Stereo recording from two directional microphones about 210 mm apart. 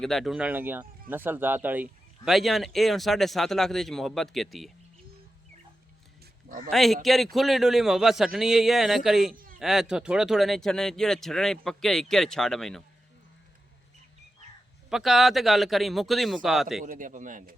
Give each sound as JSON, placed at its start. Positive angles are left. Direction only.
{"t": 0.0, "sound": "speech", "side_deg": 0}
{"t": 6.7, "sound": "speech", "side_deg": 0}
{"t": 9.3, "sound": "a sound", "side_deg": -40}
{"t": 9.6, "sound": "speech", "side_deg": 0}
{"t": 14.8, "sound": "speech", "side_deg": 0}
{"t": 16.8, "sound": "a man's voice", "side_deg": -40}